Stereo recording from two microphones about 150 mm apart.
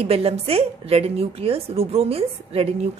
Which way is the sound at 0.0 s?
40° right (ahead or behind).